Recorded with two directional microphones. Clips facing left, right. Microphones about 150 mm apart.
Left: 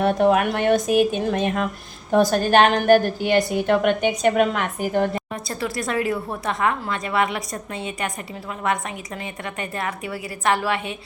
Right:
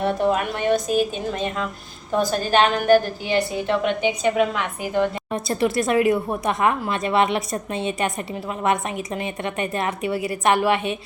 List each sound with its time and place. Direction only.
0.0 s a woman's voice: 60° left (ahead or behind)
5.3 s speech: 25° right (ahead or behind)
9.2 s speech: 20° right (ahead or behind)